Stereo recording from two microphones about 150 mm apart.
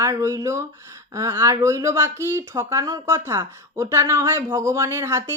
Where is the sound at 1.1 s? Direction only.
20° right (ahead or behind).